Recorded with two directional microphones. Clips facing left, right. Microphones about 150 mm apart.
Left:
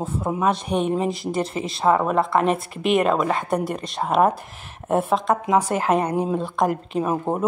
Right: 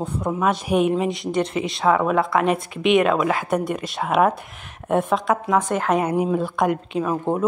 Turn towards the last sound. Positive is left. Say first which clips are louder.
# right 1 dB
turn(degrees=5)  # may be behind; listen again after turning